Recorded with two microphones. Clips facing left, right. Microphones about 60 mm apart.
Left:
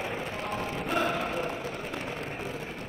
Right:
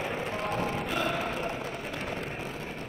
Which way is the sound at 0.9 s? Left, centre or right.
Left.